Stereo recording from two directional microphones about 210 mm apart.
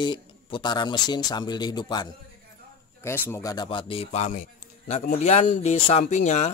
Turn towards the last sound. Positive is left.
turn(degrees=35)  # may be behind; listen again after turning